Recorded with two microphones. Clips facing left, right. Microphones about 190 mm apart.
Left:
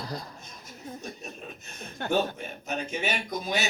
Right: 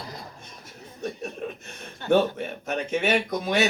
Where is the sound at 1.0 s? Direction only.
65° right (ahead or behind).